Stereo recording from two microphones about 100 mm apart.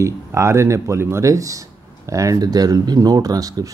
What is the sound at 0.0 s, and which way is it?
Speech, 30° right (ahead or behind).